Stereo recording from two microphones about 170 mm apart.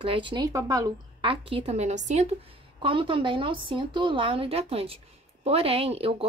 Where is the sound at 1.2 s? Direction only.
35° right (ahead or behind).